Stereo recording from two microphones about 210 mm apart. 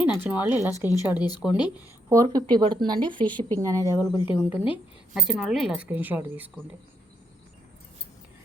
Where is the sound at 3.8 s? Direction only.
20° left (ahead or behind).